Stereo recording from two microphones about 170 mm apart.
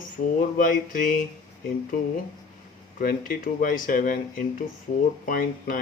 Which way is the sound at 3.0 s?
55° left (ahead or behind).